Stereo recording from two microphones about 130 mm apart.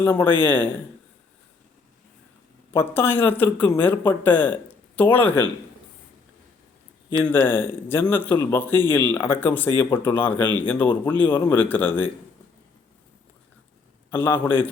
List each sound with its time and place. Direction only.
0.0 s speech: 15° left (ahead or behind)
2.7 s speech: 15° left (ahead or behind)
7.3 s speech: 15° left (ahead or behind)
14.1 s speech: 15° left (ahead or behind)